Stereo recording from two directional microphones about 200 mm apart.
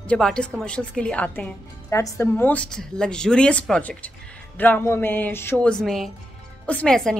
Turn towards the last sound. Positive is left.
turn(degrees=5)  # may be behind; listen again after turning